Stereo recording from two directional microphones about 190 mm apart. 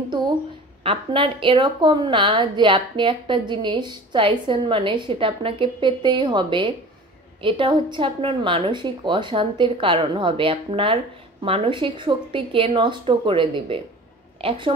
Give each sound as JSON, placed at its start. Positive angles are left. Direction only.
{"t": 0.8, "sound": "a woman's voice", "side_deg": -25}